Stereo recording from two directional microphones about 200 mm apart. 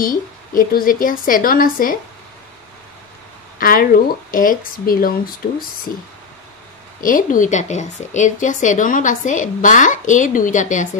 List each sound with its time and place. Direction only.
0.0 s speech: 45° left (ahead or behind)
3.5 s speech: 45° left (ahead or behind)
7.0 s a woman's voice: 45° left (ahead or behind)